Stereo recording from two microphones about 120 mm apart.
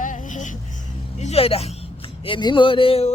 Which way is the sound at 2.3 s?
40° left (ahead or behind).